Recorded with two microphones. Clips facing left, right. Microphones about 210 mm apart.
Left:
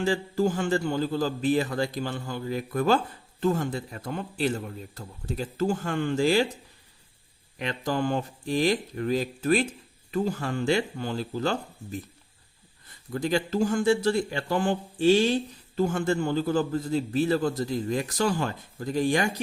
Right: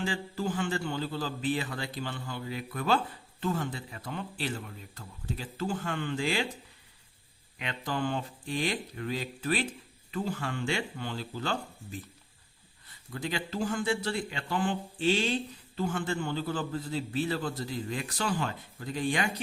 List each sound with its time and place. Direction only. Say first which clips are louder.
0.0 s a man's voice: left 8 dB; 45° left (ahead or behind)
7.6 s a man's voice: left 5 dB; 40° left (ahead or behind)
13.1 s a man's voice: left 8 dB; 45° left (ahead or behind)